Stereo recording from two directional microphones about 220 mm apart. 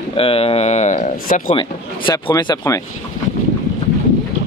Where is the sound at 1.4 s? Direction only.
20° left (ahead or behind).